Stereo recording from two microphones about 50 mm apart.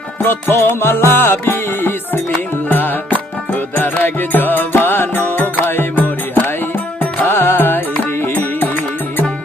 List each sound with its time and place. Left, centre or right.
0.3 s music: left